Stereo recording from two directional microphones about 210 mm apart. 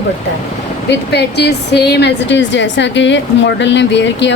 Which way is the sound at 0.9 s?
50° left (ahead or behind).